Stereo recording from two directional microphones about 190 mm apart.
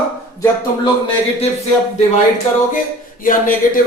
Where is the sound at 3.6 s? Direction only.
45° left (ahead or behind).